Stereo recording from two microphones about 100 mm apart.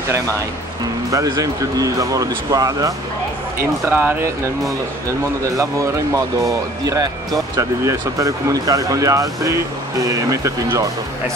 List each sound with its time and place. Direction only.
1.1 s speech: 35° right (ahead or behind)
3.5 s speech: 20° right (ahead or behind)
5.4 s speech: 30° right (ahead or behind)